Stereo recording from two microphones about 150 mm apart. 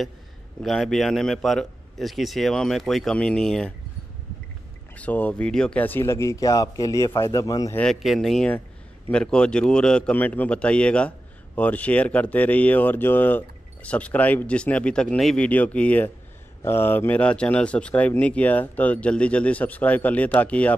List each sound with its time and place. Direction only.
0.6 s a man's voice: centre (ahead or behind)
4.9 s speech: 10° left (ahead or behind)
7.7 s a man's voice: 5° left (ahead or behind)